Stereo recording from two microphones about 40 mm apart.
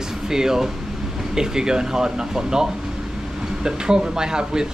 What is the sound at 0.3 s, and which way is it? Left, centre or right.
Speech, centre.